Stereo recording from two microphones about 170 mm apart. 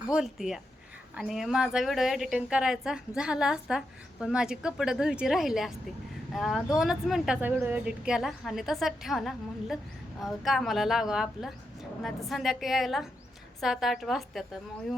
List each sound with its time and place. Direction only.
0.1 s a woman's voice: 5° right (ahead or behind)